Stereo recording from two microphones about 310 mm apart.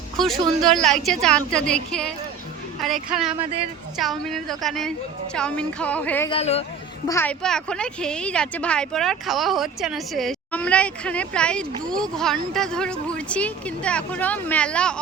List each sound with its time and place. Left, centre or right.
0.2 s speech: centre
6.3 s speech: centre
7.1 s speech: centre